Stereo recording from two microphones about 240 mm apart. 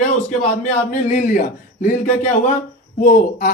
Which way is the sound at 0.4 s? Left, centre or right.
Left.